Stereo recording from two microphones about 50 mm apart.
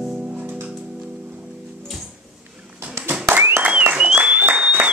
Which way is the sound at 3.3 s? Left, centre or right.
Right.